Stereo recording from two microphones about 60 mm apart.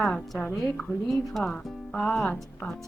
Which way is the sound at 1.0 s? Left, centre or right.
Centre.